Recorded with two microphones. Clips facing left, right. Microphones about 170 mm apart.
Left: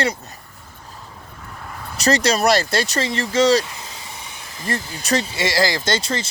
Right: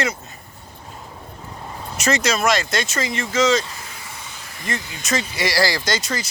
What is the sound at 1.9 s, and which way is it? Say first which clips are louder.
Speech: left 3 dB; 35° left (ahead or behind).